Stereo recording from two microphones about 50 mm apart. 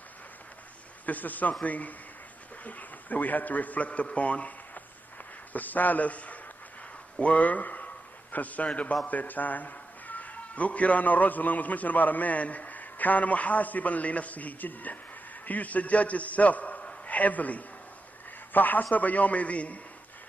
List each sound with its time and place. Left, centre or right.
1.0 s a man's voice: left